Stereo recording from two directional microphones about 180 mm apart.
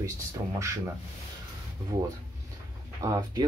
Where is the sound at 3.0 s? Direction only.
20° right (ahead or behind).